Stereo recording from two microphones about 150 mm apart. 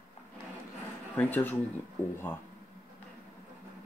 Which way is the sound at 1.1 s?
10° left (ahead or behind).